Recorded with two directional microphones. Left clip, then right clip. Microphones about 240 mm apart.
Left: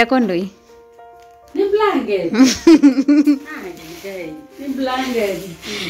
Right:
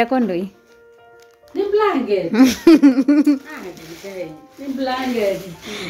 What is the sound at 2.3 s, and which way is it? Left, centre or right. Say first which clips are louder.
Speech: left 1 dB; centre.